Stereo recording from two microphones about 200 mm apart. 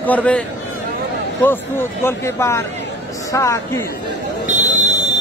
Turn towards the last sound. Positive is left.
turn(degrees=-35)  # may be behind; listen again after turning